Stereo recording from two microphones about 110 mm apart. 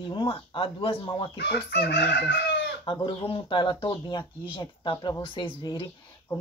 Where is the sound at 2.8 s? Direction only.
50° left (ahead or behind).